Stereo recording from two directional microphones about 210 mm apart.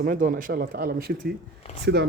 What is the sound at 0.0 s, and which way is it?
A man's voice, 40° right (ahead or behind).